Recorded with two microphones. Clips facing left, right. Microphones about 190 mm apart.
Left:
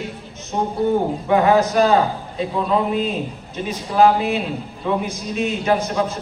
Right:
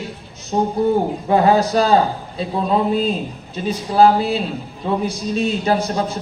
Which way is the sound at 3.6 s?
35° right (ahead or behind).